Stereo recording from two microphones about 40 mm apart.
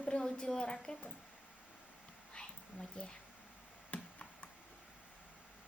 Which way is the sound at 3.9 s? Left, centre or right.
Left.